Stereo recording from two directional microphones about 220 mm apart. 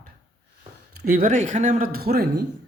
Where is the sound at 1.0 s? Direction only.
40° right (ahead or behind).